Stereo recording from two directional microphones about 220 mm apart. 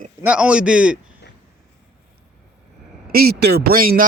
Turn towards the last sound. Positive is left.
turn(degrees=-40)  # may be behind; listen again after turning